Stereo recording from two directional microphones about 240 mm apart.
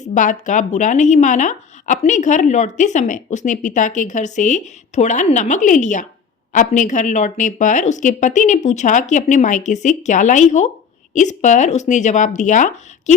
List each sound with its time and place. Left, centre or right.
0.0 s speech: left